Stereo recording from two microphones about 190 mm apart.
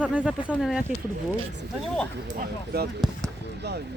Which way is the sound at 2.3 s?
55° right (ahead or behind).